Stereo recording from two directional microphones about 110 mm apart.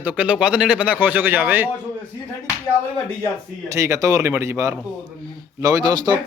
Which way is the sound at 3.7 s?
30° right (ahead or behind).